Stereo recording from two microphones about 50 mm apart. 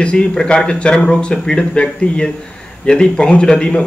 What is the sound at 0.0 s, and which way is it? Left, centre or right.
A man's voice, centre.